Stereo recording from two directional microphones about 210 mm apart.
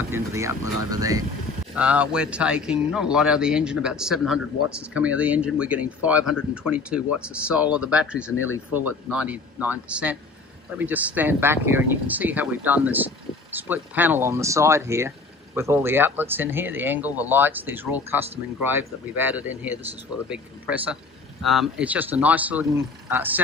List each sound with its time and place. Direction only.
0.1 s speech: 15° right (ahead or behind)
1.8 s speech: 5° right (ahead or behind)